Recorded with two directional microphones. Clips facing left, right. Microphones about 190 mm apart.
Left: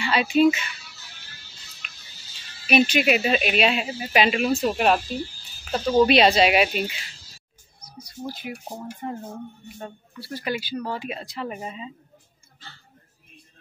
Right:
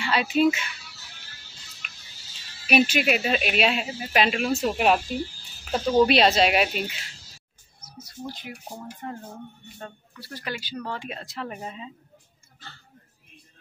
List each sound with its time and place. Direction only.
0.0 s speech: centre (ahead or behind)
1.8 s music: centre (ahead or behind)
2.6 s speech: 5° right (ahead or behind)
8.0 s speech: 5° left (ahead or behind)